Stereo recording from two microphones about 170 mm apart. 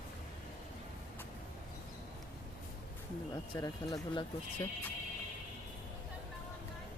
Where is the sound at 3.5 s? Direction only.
20° left (ahead or behind).